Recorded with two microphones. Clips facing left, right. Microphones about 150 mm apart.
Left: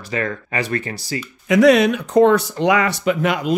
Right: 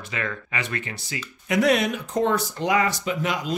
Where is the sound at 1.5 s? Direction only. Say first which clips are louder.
Left 8 dB; 90° left; by 3.6 s 60° left (ahead or behind).